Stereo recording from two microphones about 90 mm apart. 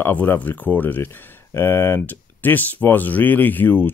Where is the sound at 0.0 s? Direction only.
20° left (ahead or behind).